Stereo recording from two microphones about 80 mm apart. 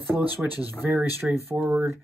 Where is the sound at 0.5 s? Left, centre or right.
Right.